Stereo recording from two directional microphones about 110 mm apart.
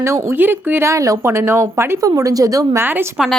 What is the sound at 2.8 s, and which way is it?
Speech, 20° right (ahead or behind).